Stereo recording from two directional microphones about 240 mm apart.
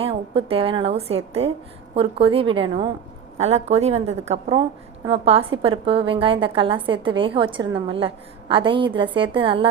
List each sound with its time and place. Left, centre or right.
0.0 s a woman's voice: right